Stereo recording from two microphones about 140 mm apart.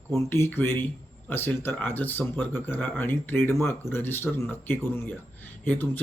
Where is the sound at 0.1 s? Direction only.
15° left (ahead or behind).